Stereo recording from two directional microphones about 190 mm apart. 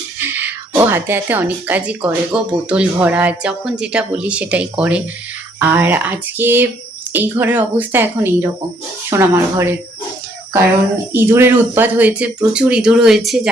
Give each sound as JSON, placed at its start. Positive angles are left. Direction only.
{"t": 0.3, "sound": "speech", "side_deg": -10}
{"t": 11.1, "sound": "speech", "side_deg": -10}